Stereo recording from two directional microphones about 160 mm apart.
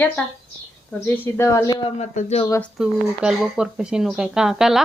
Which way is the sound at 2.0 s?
45° left (ahead or behind).